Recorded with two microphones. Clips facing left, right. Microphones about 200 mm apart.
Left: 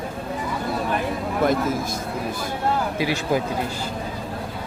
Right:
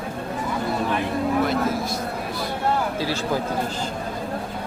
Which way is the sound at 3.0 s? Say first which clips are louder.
Left 2 dB; 15° left (ahead or behind).